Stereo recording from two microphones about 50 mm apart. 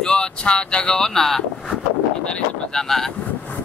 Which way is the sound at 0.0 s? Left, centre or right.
Centre.